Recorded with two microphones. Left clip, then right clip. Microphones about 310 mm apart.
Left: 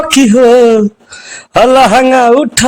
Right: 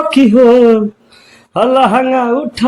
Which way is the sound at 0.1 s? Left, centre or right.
Left.